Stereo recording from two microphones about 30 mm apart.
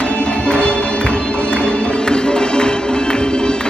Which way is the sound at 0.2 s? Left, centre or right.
Left.